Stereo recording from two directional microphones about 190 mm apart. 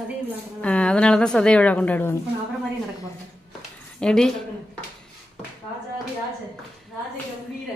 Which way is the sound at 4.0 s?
5° left (ahead or behind).